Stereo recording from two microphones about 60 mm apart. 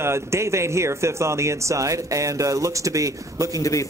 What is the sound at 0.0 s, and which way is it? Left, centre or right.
Speech, right.